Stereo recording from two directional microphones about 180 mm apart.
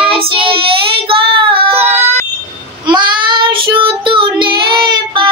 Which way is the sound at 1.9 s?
10° right (ahead or behind).